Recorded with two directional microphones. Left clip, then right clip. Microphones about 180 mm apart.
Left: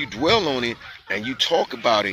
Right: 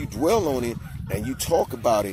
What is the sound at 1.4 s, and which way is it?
Speech, 20° left (ahead or behind).